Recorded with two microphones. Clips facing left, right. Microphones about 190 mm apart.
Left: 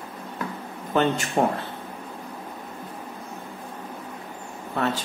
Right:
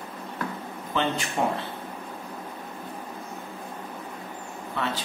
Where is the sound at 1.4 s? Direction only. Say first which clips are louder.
Left 4 dB; 40° left (ahead or behind).